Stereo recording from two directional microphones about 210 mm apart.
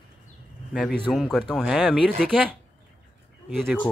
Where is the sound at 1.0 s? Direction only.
Centre (ahead or behind).